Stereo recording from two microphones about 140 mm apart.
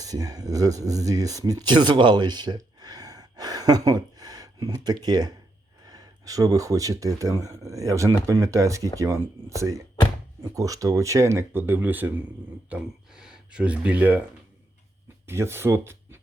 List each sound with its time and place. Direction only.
0.0 s speech: 25° right (ahead or behind)
15.3 s speech: 20° right (ahead or behind)